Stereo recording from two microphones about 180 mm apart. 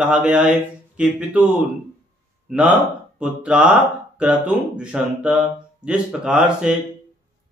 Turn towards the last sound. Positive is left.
turn(degrees=-5)  # may be behind; listen again after turning